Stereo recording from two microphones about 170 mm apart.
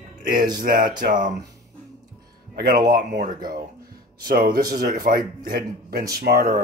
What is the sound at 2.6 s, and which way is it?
Speech, 65° right (ahead or behind).